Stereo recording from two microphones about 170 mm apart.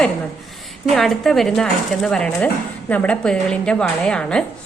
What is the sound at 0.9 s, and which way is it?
A woman's voice, centre (ahead or behind).